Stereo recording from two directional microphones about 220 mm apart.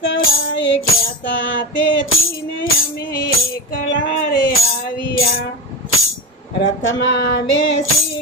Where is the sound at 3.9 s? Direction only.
55° left (ahead or behind).